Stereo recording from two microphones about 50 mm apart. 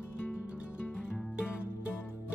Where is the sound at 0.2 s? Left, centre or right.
Left.